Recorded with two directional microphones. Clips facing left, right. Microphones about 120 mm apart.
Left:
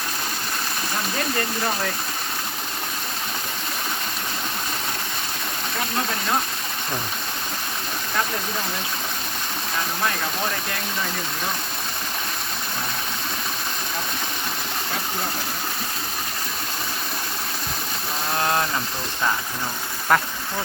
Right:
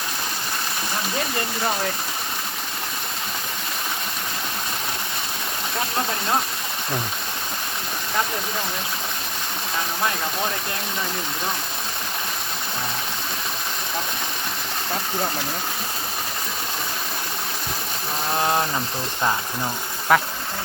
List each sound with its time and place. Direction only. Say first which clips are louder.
18.3 s ratchet: right 1 dB; 20° right (ahead or behind)
20.1 s bee: right 1 dB; 5° right (ahead or behind)